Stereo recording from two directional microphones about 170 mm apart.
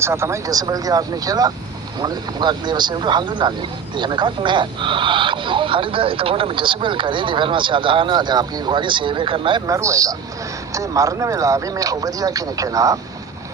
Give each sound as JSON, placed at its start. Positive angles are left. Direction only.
{"t": 0.0, "sound": "speech", "side_deg": -15}